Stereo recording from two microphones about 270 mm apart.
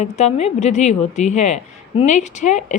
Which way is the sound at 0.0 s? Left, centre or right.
Left.